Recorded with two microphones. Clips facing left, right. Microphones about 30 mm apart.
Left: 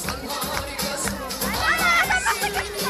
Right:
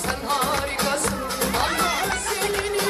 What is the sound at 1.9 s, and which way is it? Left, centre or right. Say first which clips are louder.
Music: left 5 dB; left.